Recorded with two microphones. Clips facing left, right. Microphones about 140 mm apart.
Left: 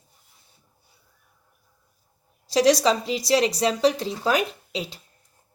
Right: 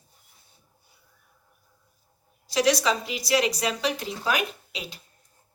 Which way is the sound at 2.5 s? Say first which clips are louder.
Left 4 dB; 35° left (ahead or behind).